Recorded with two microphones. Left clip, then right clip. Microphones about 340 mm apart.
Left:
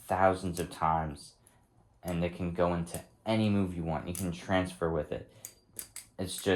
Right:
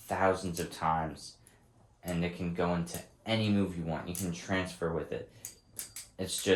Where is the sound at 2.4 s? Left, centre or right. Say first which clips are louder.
Left 3 dB; centre.